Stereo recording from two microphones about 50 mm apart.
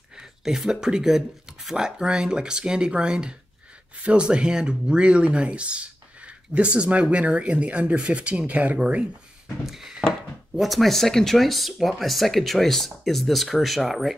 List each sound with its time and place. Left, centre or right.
0.2 s speech: centre; by 8.7 s right
9.7 s speech: centre